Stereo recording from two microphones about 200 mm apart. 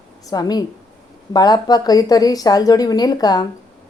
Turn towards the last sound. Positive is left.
turn(degrees=20)  # may be behind; listen again after turning